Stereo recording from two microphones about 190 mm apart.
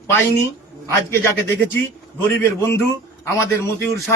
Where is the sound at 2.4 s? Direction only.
10° left (ahead or behind).